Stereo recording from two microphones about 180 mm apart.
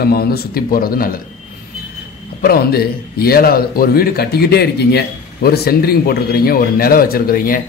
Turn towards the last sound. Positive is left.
turn(degrees=55)  # may be behind; listen again after turning